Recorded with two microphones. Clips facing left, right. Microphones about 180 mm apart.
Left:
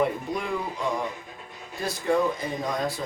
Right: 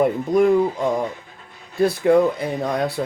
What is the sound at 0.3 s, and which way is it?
Speech, 45° right (ahead or behind).